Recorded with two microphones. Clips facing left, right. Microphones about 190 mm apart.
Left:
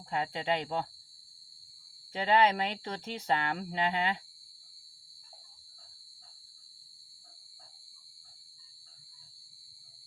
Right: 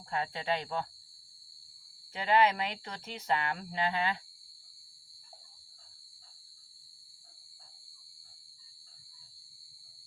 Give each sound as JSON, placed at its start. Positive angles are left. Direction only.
{"t": 0.1, "sound": "speech", "side_deg": 20}
{"t": 2.1, "sound": "speech", "side_deg": 25}